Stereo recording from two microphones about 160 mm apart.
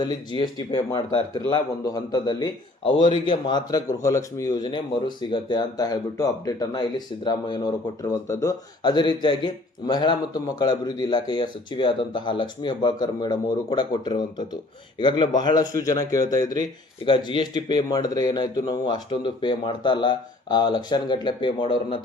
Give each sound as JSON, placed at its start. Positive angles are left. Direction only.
{"t": 0.0, "sound": "speech", "side_deg": 25}